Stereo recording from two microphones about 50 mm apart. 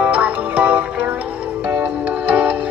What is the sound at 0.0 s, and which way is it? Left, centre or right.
Music, right.